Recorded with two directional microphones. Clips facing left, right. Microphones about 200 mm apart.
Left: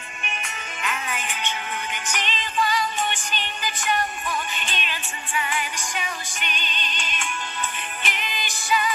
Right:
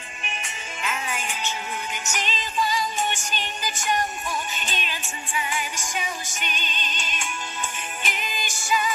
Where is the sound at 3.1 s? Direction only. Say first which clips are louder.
Even; 45° right (ahead or behind).